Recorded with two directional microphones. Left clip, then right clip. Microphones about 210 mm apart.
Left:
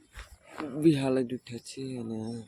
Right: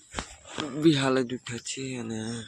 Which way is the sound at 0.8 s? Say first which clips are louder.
Right 2 dB; centre (ahead or behind).